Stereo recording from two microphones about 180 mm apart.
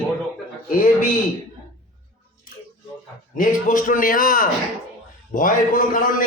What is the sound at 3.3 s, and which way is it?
A man's voice, 50° left (ahead or behind).